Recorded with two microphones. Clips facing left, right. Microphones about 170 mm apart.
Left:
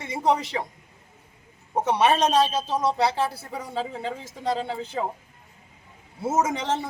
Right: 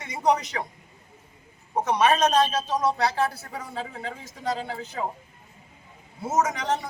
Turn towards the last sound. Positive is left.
turn(degrees=25)  # may be behind; listen again after turning